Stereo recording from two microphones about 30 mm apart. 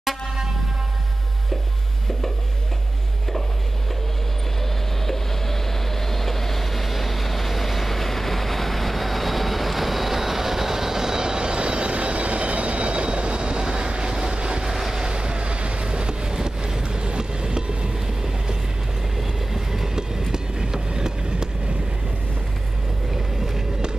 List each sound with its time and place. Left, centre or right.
5.0 s vehicle: centre; by 14.7 s right
14.7 s vehicle: centre
15.0 s vehicle: right
19.1 s train: centre
23.1 s vehicle: centre